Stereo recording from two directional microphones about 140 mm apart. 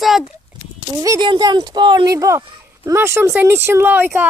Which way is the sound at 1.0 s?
25° right (ahead or behind).